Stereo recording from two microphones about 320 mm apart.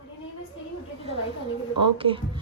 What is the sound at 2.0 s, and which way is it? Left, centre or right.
Speech, centre.